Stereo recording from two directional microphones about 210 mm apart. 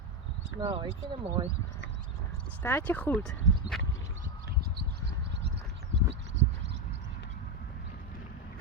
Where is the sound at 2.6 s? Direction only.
10° left (ahead or behind).